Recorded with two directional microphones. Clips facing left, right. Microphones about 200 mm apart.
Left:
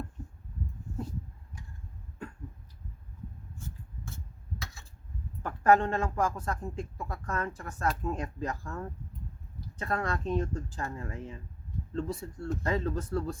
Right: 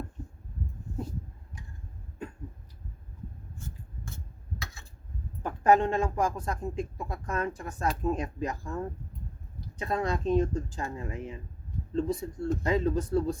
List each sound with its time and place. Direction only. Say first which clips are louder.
5.4 s speech: right 1 dB; 15° right (ahead or behind)